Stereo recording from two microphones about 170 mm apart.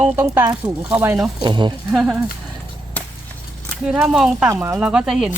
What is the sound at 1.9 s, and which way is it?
Speech, 5° right (ahead or behind).